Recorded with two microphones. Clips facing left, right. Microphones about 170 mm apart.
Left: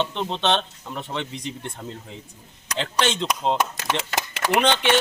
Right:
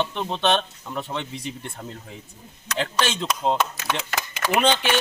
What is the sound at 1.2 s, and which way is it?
Speech, 20° left (ahead or behind).